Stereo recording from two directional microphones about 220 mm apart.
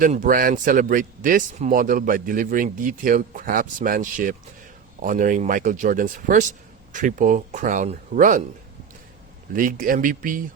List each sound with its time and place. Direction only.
0.0 s a man's voice: 35° right (ahead or behind)
9.5 s a man's voice: 40° right (ahead or behind)